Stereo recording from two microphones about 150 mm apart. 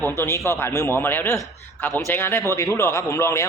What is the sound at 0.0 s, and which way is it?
Speech, 15° left (ahead or behind).